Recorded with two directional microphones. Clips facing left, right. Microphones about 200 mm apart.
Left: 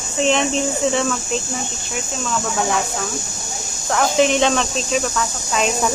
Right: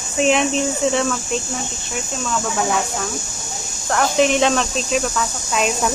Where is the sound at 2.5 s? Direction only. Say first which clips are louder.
Even; centre (ahead or behind).